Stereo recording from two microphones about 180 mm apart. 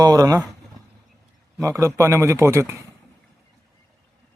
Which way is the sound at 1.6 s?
15° right (ahead or behind).